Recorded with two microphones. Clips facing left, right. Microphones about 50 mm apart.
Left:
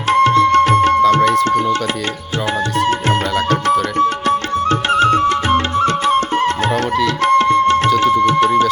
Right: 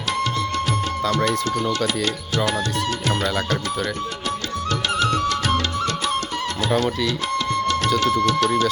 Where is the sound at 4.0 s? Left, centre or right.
Left.